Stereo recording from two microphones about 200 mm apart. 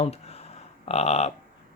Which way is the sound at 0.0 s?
30° left (ahead or behind).